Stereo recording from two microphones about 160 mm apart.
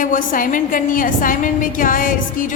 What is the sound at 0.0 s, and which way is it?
A woman's voice, 55° left (ahead or behind).